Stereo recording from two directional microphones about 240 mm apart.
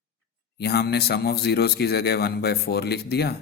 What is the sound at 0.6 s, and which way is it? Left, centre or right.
A man's voice, left.